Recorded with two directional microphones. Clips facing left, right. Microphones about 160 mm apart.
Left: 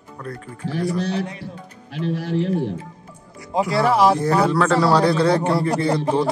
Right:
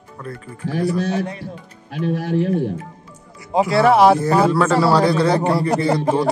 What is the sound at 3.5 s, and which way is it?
Speech, 75° right (ahead or behind).